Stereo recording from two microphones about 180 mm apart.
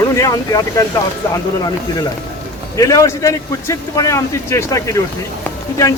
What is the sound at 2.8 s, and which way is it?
A man's voice, 20° left (ahead or behind).